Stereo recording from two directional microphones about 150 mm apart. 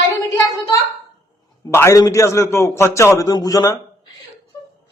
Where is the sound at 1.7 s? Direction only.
20° left (ahead or behind).